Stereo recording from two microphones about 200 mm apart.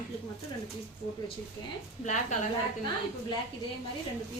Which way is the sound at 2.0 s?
35° left (ahead or behind).